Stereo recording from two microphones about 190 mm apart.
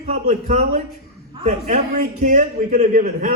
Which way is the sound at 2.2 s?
40° right (ahead or behind).